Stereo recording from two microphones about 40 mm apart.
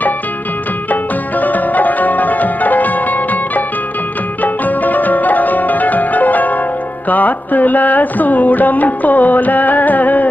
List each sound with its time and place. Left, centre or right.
1.4 s music: left